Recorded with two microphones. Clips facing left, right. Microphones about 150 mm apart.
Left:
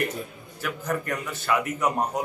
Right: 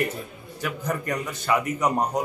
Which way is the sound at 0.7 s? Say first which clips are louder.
Even; 10° right (ahead or behind).